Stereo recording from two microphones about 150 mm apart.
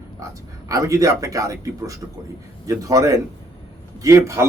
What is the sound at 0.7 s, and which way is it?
A man's voice, 20° right (ahead or behind).